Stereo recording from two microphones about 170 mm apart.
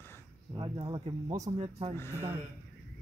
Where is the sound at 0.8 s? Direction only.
25° right (ahead or behind).